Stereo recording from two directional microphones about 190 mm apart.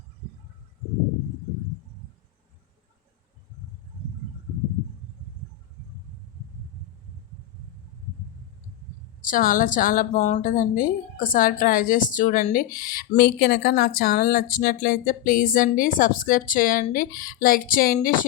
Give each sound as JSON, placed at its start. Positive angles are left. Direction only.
{"t": 9.2, "sound": "a woman's voice", "side_deg": 45}